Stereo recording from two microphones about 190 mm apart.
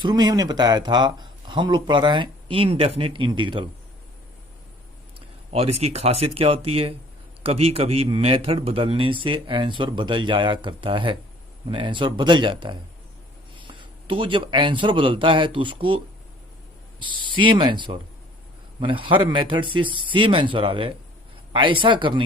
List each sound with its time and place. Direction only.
0.0 s speech: 20° right (ahead or behind)
5.5 s a man's voice: 30° right (ahead or behind)
17.3 s speech: 25° right (ahead or behind)